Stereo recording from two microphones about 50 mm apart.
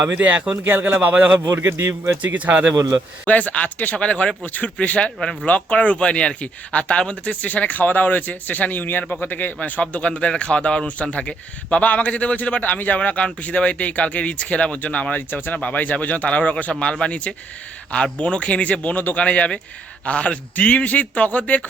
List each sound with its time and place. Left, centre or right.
0.2 s speech: right
0.6 s a man's voice: right
1.0 s speech: right
1.5 s a man's voice: right
2.2 s speech: right
3.2 s a man's voice: left
15.3 s speech: left
15.5 s a man's voice: left
16.9 s a man's voice: left